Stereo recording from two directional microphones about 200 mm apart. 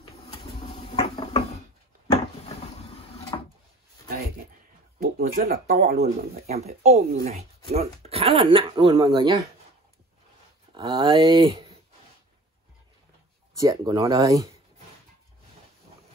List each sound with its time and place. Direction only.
0.3 s a sound: 25° left (ahead or behind)
3.3 s drawer open or close: 20° left (ahead or behind)
5.0 s speech: 45° right (ahead or behind); by 9.5 s 20° right (ahead or behind)
10.7 s speech: 20° right (ahead or behind)
13.6 s speech: 15° right (ahead or behind)